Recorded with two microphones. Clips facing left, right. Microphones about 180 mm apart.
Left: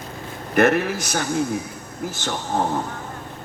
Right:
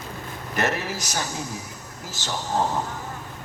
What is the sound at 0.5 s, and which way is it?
A man's voice, 55° left (ahead or behind).